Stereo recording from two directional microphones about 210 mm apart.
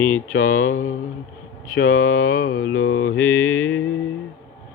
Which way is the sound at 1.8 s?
45° left (ahead or behind).